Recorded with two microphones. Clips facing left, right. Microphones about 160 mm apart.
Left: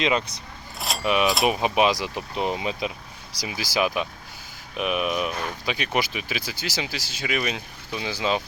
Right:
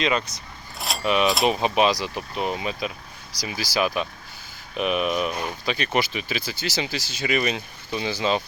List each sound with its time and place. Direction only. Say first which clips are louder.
0.0 s speech: even; 15° left (ahead or behind)
0.8 s keys jangling: even; centre (ahead or behind)
1.0 s speech: right 1 dB; 10° left (ahead or behind)
5.3 s speech: right 1 dB; 15° right (ahead or behind)
5.6 s speech: right 2 dB; 10° left (ahead or behind)